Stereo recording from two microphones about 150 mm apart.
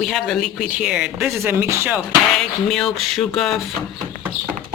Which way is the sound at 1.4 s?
15° right (ahead or behind).